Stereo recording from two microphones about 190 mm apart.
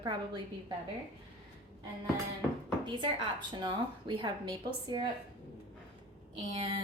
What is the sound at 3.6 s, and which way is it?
A woman's voice, 25° right (ahead or behind).